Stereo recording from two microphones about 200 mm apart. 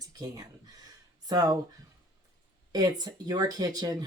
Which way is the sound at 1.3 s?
20° right (ahead or behind).